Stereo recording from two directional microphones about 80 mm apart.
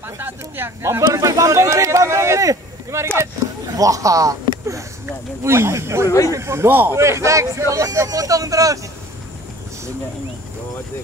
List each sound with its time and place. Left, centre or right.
0.2 s speech: right
1.0 s a man's voice: right
5.4 s speech: right
6.0 s speech: left
6.3 s speech: right